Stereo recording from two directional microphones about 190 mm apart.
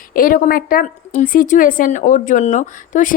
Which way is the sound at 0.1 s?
50° left (ahead or behind).